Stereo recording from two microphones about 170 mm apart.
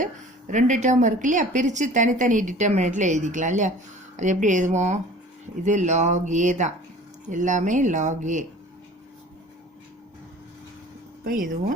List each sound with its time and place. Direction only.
0.5 s a woman's voice: 45° right (ahead or behind)
11.2 s speech: 55° right (ahead or behind)